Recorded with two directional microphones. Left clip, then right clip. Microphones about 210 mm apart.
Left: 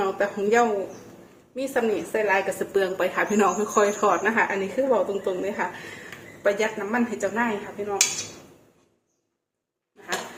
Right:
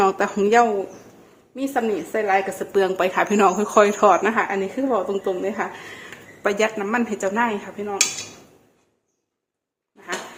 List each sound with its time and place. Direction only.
0.0 s speech: 45° right (ahead or behind)
1.5 s a woman's voice: 35° right (ahead or behind); by 7.9 s 50° right (ahead or behind)